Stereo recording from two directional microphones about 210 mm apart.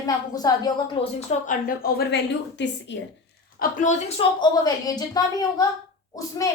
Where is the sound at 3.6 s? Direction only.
40° left (ahead or behind).